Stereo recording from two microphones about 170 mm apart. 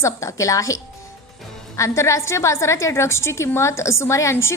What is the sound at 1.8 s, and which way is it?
A woman's voice, 15° left (ahead or behind).